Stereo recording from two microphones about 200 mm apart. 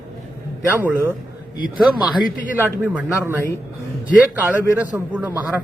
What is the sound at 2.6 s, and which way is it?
Speech, 10° right (ahead or behind).